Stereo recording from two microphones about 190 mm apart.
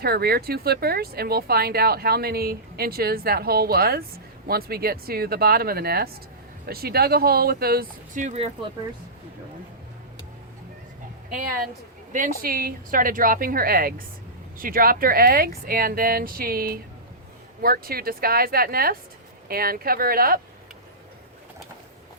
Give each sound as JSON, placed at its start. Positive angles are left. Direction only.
{"t": 0.0, "sound": "speech", "side_deg": -55}
{"t": 12.1, "sound": "speech", "side_deg": -50}